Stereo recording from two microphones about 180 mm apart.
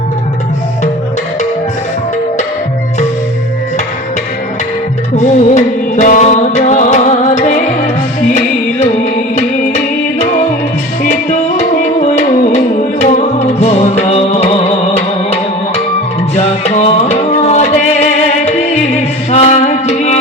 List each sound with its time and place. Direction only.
5.1 s music: 45° left (ahead or behind)